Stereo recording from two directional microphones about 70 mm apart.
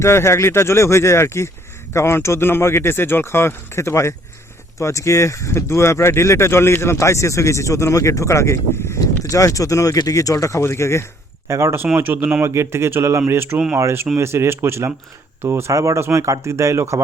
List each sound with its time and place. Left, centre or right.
0.0 s speech: left
11.4 s speech: right
12.4 s speech: right